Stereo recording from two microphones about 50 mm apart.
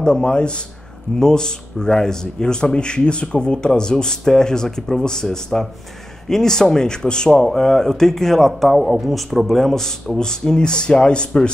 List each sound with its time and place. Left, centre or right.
0.0 s a man's voice: centre